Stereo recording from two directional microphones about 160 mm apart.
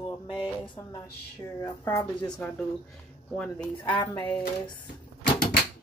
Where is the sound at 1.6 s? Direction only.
20° left (ahead or behind).